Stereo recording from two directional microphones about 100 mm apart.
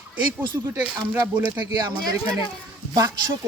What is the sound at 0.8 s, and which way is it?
Speech, 15° right (ahead or behind).